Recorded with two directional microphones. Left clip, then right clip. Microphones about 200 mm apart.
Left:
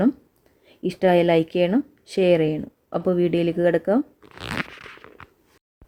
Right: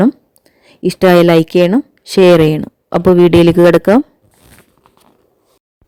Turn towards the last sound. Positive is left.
turn(degrees=-50)  # may be behind; listen again after turning